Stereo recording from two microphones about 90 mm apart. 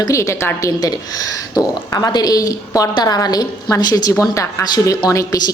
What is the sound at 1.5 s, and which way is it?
A woman's voice, 45° left (ahead or behind).